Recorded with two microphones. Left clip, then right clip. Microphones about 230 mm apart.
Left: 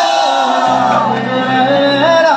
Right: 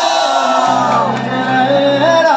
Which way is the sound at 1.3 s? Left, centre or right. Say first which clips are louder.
Even; left.